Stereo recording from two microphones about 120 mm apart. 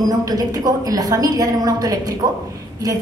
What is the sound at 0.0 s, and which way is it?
A woman's voice, 30° right (ahead or behind).